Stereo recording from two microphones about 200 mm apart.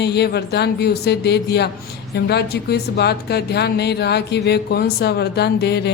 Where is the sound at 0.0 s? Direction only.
55° left (ahead or behind).